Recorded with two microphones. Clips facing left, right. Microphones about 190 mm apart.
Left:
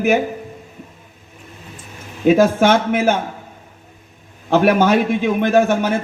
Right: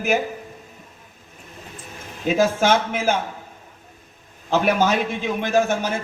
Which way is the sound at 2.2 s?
55° left (ahead or behind).